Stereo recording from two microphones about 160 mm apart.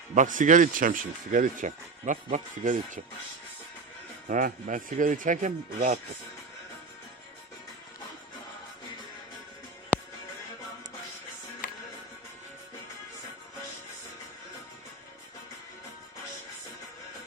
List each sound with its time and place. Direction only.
0.1 s speech: 55° right (ahead or behind)
4.3 s speech: 60° right (ahead or behind)
11.6 s music: 60° left (ahead or behind)